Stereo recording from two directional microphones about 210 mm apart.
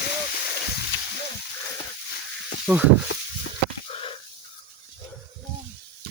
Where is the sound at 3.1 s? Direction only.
60° left (ahead or behind).